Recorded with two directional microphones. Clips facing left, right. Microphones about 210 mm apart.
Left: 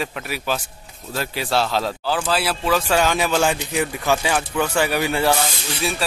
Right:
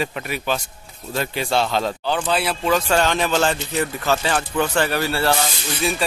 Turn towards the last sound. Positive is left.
turn(degrees=5)  # may be behind; listen again after turning